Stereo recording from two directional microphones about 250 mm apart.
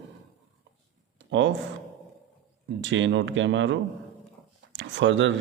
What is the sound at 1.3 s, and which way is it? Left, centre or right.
Speech, right.